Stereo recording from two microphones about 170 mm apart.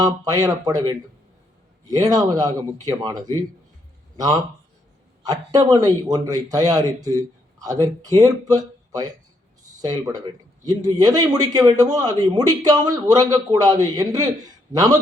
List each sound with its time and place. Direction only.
0.0 s a man's voice: 20° right (ahead or behind)
5.2 s a man's voice: 25° right (ahead or behind)